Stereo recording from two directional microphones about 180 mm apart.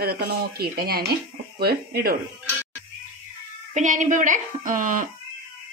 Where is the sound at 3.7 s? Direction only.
45° right (ahead or behind).